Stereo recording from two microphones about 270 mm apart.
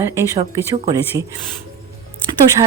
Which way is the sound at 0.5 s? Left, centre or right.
Centre.